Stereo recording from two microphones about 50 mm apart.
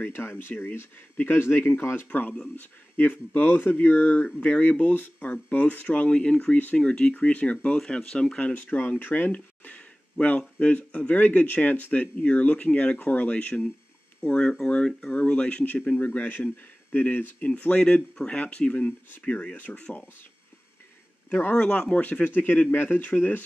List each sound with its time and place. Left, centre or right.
0.1 s speech: left
2.0 s speech: left
8.5 s speech: left
9.6 s a sound: left
10.6 s speech: left
17.6 s speech: left
21.3 s speech: left
21.6 s speech: left